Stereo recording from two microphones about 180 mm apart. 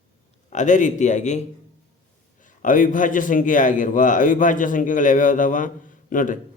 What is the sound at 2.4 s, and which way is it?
A man's voice, 45° left (ahead or behind).